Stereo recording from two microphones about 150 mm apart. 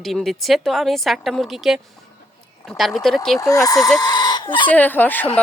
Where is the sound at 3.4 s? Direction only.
20° left (ahead or behind).